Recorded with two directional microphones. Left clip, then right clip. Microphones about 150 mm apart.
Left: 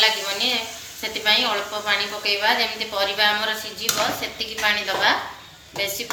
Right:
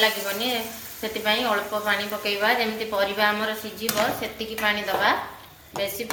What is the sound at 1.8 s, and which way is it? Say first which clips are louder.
A woman's voice: left 2 dB; 35° right (ahead or behind).